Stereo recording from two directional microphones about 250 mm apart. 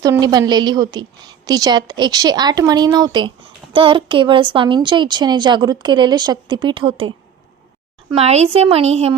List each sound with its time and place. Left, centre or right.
0.0 s a woman's voice: centre
8.1 s a woman's voice: right